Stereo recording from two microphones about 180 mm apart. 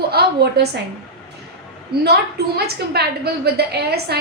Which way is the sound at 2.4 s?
65° right (ahead or behind).